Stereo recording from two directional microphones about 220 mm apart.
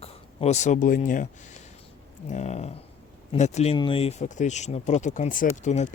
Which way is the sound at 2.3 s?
30° left (ahead or behind).